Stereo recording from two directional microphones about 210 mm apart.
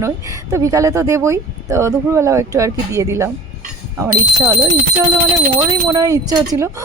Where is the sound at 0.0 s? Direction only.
15° right (ahead or behind).